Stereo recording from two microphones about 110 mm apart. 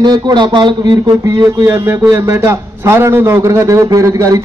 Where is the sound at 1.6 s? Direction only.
25° right (ahead or behind).